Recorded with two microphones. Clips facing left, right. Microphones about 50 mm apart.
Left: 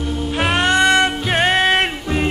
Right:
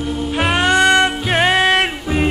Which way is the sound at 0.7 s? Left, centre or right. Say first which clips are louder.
Right 2 dB; centre.